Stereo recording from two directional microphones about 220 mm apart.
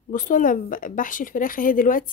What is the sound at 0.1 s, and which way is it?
Speech, 35° left (ahead or behind).